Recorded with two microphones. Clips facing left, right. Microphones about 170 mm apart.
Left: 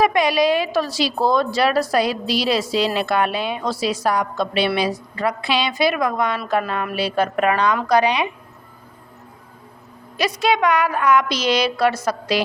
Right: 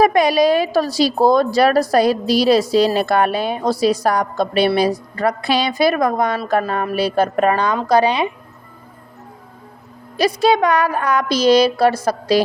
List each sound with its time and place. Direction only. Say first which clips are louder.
0.0 s a woman's voice: right 4 dB; 40° right (ahead or behind)
10.2 s a woman's voice: right 4 dB; 35° right (ahead or behind)